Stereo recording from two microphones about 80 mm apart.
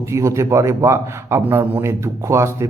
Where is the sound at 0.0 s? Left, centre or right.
Right.